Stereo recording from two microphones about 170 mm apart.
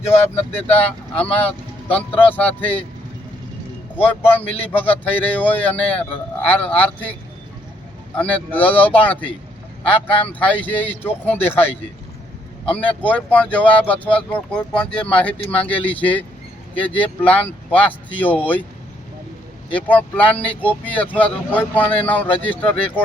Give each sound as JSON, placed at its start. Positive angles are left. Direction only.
{"t": 0.0, "sound": "speech", "side_deg": 40}
{"t": 0.8, "sound": "speech", "side_deg": 10}
{"t": 4.0, "sound": "speech", "side_deg": 10}
{"t": 19.7, "sound": "speech", "side_deg": 10}